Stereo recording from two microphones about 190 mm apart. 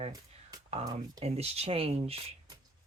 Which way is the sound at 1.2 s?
35° right (ahead or behind).